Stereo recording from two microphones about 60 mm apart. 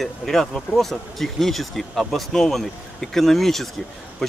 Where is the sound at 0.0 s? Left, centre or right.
Centre.